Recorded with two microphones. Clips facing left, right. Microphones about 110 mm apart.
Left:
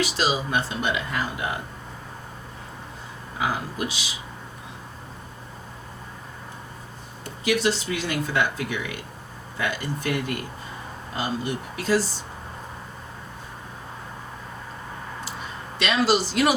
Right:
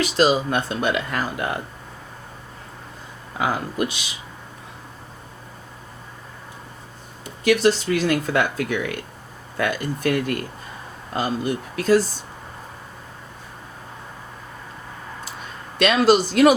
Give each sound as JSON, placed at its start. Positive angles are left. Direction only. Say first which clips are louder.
{"t": 0.2, "sound": "speech", "louder": "right 10 dB", "side_deg": -50}
{"t": 3.4, "sound": "speech", "louder": "right 4 dB", "side_deg": -55}
{"t": 7.4, "sound": "speech", "louder": "right 6 dB", "side_deg": -50}
{"t": 15.8, "sound": "speech", "louder": "right 5 dB", "side_deg": -50}